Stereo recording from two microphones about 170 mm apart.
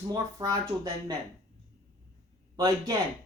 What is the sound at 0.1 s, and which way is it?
Speech, 20° right (ahead or behind).